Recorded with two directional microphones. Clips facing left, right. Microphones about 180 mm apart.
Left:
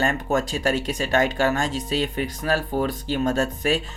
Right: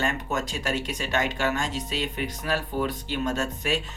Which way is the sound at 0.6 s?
30° left (ahead or behind).